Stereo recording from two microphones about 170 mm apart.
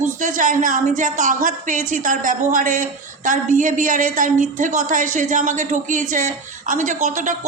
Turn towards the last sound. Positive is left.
turn(degrees=-45)  # may be behind; listen again after turning